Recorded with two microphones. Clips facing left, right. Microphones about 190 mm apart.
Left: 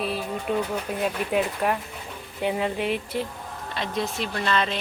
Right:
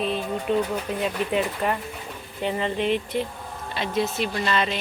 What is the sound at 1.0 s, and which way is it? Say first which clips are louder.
Wind chime: left 1 dB; 5° left (ahead or behind).